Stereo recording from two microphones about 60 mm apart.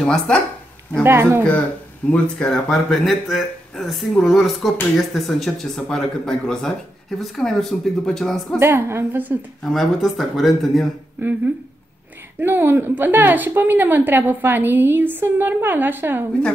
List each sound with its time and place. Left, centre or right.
0.0 s speech: centre
1.0 s a woman's voice: right
2.0 s speech: left
2.3 s speech: centre
8.5 s a woman's voice: right
9.6 s speech: centre
11.1 s a woman's voice: right